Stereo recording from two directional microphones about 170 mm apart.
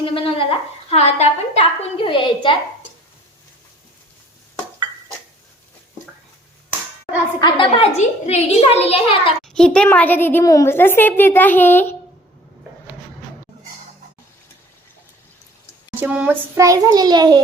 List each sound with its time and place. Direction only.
0.0 s a sound: 30° left (ahead or behind)
0.9 s a woman's voice: 40° left (ahead or behind)
7.4 s a woman's voice: 30° left (ahead or behind)
7.9 s a woman's voice: 40° left (ahead or behind)
9.6 s a woman's voice: 5° left (ahead or behind)
16.0 s a child's voice: 10° right (ahead or behind); by 17.4 s 25° right (ahead or behind)